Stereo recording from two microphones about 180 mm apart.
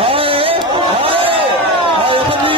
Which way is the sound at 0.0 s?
30° right (ahead or behind).